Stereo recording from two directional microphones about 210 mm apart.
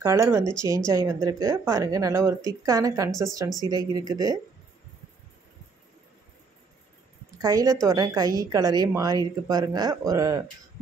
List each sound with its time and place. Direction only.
0.0 s a woman's voice: 15° right (ahead or behind)
7.2 s a woman's voice: 15° right (ahead or behind)